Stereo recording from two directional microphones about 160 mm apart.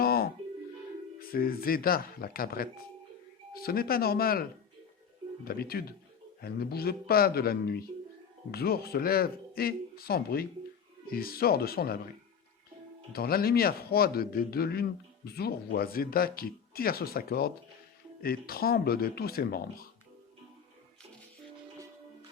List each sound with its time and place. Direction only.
0.0 s music: 70° left (ahead or behind)
1.3 s a man's voice: 65° left (ahead or behind)
5.5 s a man's voice: 70° left (ahead or behind)
13.1 s a man's voice: 70° left (ahead or behind)